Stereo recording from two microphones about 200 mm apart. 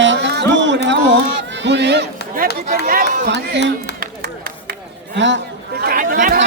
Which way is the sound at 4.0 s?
45° right (ahead or behind).